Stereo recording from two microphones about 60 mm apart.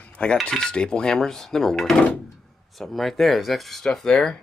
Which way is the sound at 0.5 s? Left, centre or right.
Centre.